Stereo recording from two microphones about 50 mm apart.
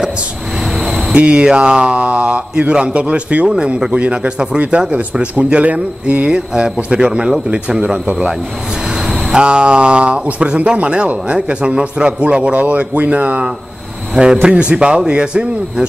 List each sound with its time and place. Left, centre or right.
1.1 s speech: right
3.4 s speech: centre
9.3 s speech: centre
14.1 s speech: centre